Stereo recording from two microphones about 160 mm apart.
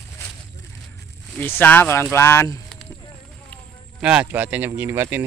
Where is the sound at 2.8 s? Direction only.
5° left (ahead or behind).